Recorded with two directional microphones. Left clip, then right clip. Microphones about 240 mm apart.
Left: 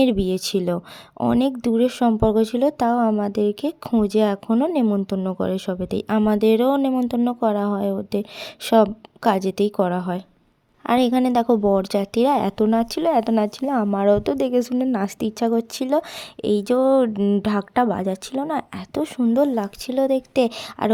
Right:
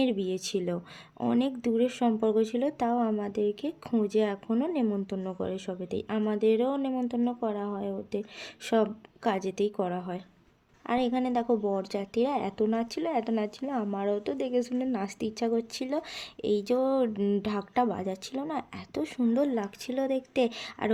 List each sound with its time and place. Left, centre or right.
0.0 s a woman's voice: left